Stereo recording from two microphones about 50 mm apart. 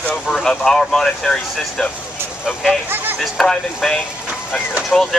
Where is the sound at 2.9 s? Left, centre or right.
Right.